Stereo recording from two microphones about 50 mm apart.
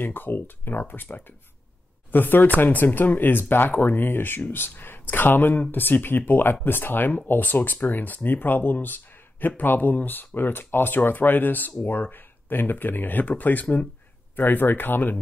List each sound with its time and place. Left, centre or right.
0.0 s speech: left
14.3 s speech: left